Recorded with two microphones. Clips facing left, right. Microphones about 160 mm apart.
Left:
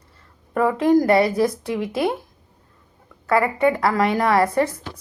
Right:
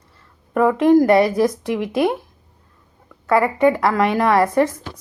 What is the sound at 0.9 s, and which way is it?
Speech, 25° right (ahead or behind).